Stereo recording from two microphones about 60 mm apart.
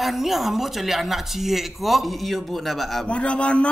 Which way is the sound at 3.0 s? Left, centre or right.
Centre.